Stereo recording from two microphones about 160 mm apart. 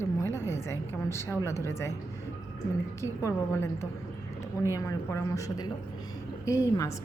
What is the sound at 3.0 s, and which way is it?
A woman's voice, 15° left (ahead or behind).